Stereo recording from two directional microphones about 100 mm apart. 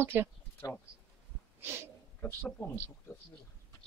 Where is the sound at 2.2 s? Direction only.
15° left (ahead or behind).